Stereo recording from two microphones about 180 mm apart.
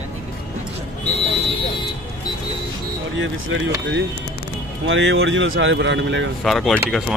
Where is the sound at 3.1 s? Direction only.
90° right.